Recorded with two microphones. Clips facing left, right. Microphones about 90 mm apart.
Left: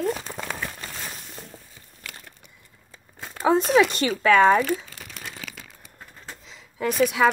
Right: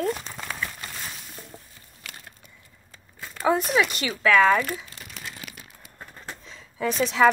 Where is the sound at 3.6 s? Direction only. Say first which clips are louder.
Left 5 dB; 35° left (ahead or behind).